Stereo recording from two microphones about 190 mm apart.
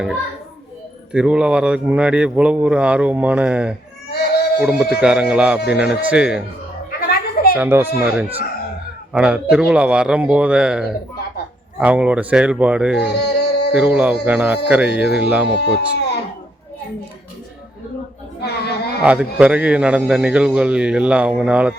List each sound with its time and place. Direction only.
1.1 s a man's voice: 5° right (ahead or behind)
4.1 s a sound: 55° left (ahead or behind)
4.8 s a man's voice: 5° right (ahead or behind)
7.5 s a man's voice: 10° right (ahead or behind)
13.0 s music: 60° left (ahead or behind)
13.7 s a man's voice: 5° right (ahead or behind)
15.6 s speech: 60° left (ahead or behind)
18.4 s chatter: 60° left (ahead or behind)
19.0 s a man's voice: 5° right (ahead or behind)